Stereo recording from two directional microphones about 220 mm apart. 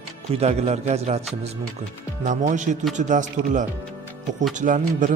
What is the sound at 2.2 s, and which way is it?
Speech, 35° right (ahead or behind).